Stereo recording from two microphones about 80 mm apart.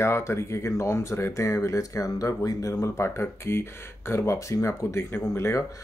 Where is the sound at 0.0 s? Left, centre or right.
Left.